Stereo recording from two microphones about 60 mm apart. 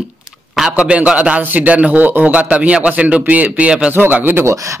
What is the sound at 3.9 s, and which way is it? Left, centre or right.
Speech, right.